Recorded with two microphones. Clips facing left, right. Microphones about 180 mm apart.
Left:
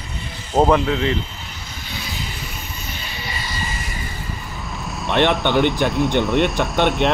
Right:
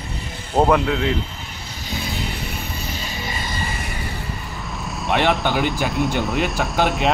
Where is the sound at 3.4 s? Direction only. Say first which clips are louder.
Right 1 dB; 55° right (ahead or behind).